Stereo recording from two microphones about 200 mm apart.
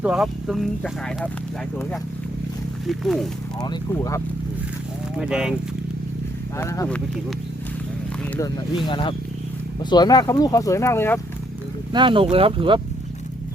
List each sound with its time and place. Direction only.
0.0 s speech: 5° right (ahead or behind)
2.8 s speech: centre (ahead or behind)
3.6 s speech: 20° left (ahead or behind)
5.1 s speech: 5° right (ahead or behind)
6.6 s speech: 15° left (ahead or behind)
8.9 s speech: 25° left (ahead or behind)
11.9 s speech: 25° right (ahead or behind)